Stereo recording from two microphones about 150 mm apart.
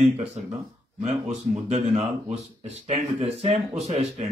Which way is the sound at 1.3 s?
50° right (ahead or behind).